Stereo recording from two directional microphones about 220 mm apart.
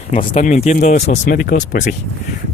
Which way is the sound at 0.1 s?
30° left (ahead or behind).